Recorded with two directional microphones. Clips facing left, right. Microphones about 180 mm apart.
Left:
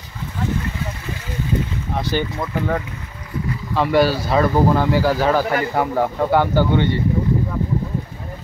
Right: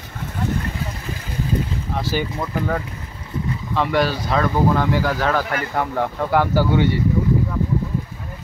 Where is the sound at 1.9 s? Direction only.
5° right (ahead or behind).